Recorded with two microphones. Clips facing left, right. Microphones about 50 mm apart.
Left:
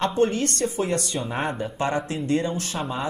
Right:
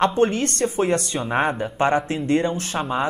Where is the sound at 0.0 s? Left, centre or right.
Right.